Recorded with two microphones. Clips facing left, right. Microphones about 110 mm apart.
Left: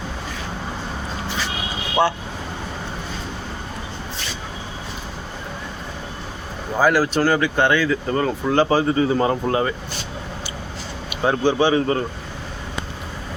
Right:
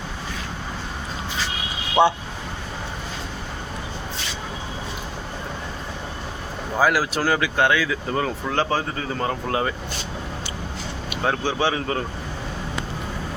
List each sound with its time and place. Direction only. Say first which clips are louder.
2.0 s speech: right 2 dB; 20° right (ahead or behind)
6.7 s speech: left 3 dB; 5° right (ahead or behind)
11.1 s speech: left 5 dB; 5° left (ahead or behind)